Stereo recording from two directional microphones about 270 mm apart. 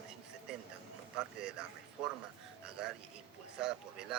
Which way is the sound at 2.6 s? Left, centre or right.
Centre.